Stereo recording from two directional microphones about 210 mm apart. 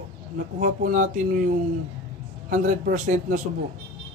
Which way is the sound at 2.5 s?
35° right (ahead or behind).